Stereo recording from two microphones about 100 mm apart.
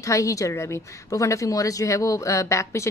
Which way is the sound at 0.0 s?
35° left (ahead or behind).